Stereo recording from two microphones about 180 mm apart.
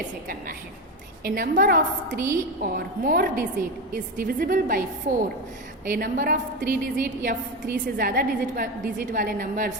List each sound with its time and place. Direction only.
1.2 s a woman's voice: 50° right (ahead or behind)
5.1 s a woman's voice: 60° right (ahead or behind)